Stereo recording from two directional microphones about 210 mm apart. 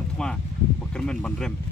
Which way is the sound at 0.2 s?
5° left (ahead or behind).